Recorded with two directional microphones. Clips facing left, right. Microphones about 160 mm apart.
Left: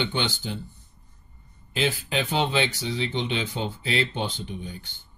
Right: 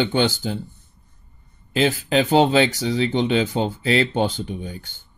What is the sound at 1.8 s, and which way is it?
Speech, 40° right (ahead or behind).